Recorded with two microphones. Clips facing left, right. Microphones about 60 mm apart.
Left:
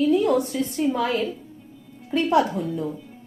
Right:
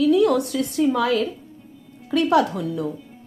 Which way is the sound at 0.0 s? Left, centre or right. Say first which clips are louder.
Right 2 dB; right.